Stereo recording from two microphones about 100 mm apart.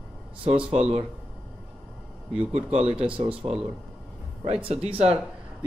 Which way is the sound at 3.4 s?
60° right (ahead or behind).